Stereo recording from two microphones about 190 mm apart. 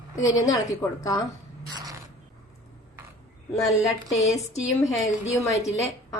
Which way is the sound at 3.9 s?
15° left (ahead or behind).